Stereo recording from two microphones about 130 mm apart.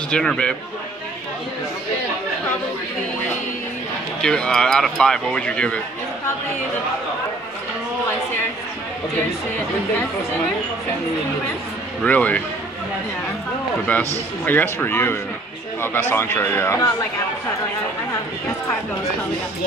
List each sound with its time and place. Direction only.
0.1 s a man's voice: 5° left (ahead or behind)
4.2 s speech: 5° left (ahead or behind)
12.0 s a man's voice: 10° left (ahead or behind)
14.4 s a man's voice: 15° left (ahead or behind)